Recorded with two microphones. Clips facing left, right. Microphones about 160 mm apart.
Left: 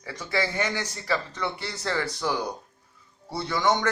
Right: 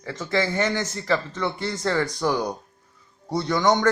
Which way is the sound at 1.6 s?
45° right (ahead or behind).